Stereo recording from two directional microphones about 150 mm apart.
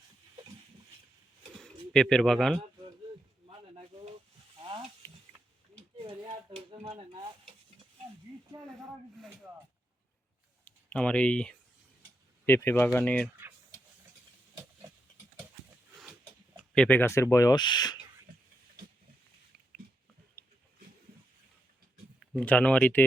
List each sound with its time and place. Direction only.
1.9 s speech: 5° left (ahead or behind)
3.5 s a sound: 40° right (ahead or behind)
5.7 s stir: 35° right (ahead or behind)
8.6 s speech: 5° left (ahead or behind)
10.7 s speech: 10° left (ahead or behind)
16.7 s speech: 10° left (ahead or behind); by 17.9 s 30° left (ahead or behind)
22.4 s speech: 10° left (ahead or behind)